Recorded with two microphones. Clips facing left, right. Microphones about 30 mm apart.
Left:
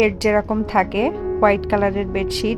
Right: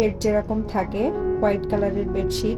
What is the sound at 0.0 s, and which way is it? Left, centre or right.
A woman's voice, left.